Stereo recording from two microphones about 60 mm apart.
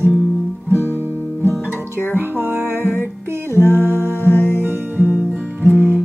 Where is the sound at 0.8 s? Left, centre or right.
Right.